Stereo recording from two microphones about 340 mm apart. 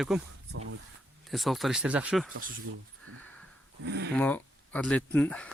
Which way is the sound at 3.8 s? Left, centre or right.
Right.